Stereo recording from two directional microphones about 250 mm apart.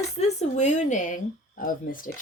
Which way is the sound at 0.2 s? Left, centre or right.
Left.